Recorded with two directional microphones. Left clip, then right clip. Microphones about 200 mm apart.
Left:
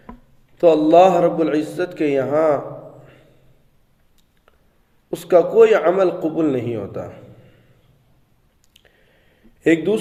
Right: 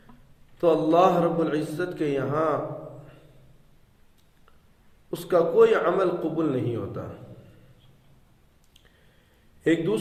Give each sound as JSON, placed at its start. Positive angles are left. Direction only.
{"t": 0.6, "sound": "a man's voice", "side_deg": 40}
{"t": 5.1, "sound": "a man's voice", "side_deg": 40}
{"t": 9.6, "sound": "a man's voice", "side_deg": 40}